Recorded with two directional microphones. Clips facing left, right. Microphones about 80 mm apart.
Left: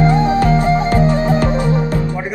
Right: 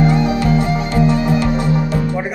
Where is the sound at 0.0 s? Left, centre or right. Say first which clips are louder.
Left 2 dB; left.